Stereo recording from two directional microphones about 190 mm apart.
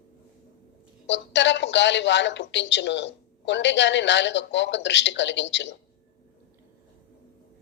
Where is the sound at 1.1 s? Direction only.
70° left (ahead or behind).